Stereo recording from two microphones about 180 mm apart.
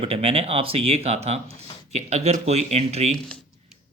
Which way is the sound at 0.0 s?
35° right (ahead or behind).